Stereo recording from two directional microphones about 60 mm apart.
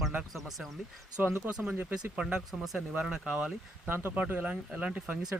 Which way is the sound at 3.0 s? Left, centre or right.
Centre.